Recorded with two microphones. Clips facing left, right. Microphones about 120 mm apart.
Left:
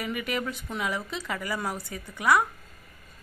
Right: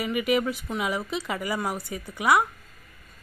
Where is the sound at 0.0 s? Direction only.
10° right (ahead or behind).